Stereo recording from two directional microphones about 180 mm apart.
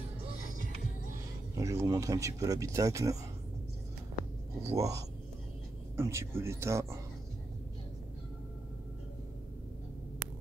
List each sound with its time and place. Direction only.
1.5 s speech: 15° right (ahead or behind)
4.6 s speech: 15° right (ahead or behind)